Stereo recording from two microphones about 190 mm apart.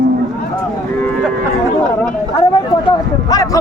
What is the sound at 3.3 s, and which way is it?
Speech, 20° left (ahead or behind).